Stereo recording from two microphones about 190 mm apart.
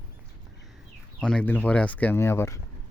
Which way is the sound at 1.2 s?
5° left (ahead or behind).